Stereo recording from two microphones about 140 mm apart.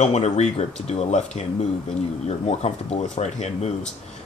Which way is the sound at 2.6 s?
50° left (ahead or behind).